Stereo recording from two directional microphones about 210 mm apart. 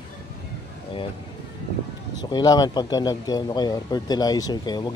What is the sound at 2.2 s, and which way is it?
Speech, 20° left (ahead or behind).